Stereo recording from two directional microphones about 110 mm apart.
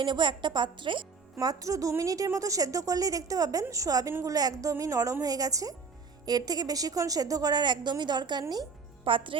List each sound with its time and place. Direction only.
0.0 s a woman's voice: 45° right (ahead or behind)
1.4 s a woman's voice: 35° right (ahead or behind)
9.0 s a woman's voice: 50° right (ahead or behind)